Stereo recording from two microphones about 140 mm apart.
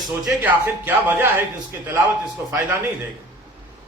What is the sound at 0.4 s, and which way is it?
Speech, 15° right (ahead or behind).